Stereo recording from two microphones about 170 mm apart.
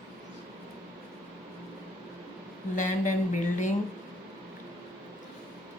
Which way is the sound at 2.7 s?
50° left (ahead or behind).